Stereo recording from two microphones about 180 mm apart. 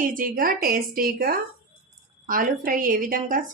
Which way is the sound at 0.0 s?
50° right (ahead or behind).